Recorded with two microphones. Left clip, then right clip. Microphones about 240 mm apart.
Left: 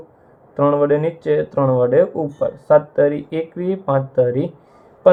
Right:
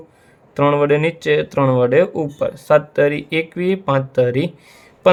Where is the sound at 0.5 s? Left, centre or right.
Right.